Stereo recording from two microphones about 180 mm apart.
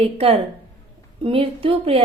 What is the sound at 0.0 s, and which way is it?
A woman's voice, 30° right (ahead or behind).